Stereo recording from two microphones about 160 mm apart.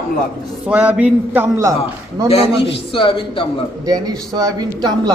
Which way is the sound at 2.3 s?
35° left (ahead or behind).